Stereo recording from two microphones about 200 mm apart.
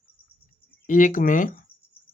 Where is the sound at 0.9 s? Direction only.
40° left (ahead or behind).